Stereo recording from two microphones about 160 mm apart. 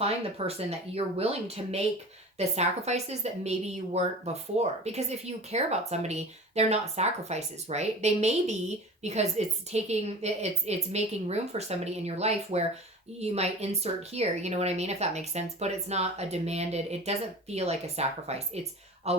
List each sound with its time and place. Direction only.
0.0 s a woman's voice: 40° right (ahead or behind)